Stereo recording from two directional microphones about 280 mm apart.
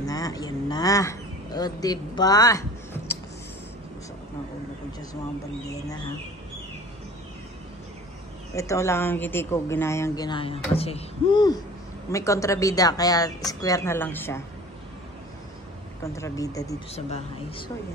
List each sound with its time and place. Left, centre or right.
0.0 s speech: centre
8.5 s speech: centre
16.0 s a woman's voice: centre